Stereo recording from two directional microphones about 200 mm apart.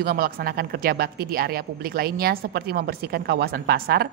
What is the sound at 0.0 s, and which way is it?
A woman's voice, 45° right (ahead or behind).